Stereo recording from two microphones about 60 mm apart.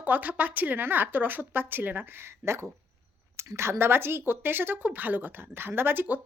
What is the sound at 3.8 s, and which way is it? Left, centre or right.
Speech, right.